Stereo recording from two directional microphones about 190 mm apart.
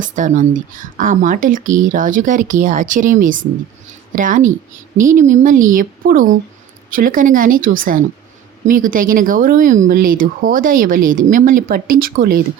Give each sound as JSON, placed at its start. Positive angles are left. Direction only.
{"t": 0.0, "sound": "speech", "side_deg": -40}